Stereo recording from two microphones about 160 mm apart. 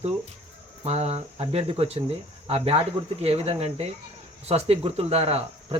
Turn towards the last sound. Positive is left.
turn(degrees=-40)  # may be behind; listen again after turning